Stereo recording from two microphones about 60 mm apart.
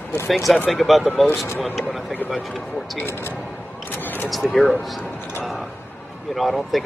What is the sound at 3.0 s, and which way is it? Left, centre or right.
Speech, left.